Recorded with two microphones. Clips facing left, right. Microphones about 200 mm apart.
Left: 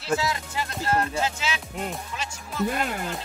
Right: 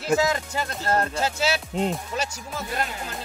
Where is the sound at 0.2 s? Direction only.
45° right (ahead or behind).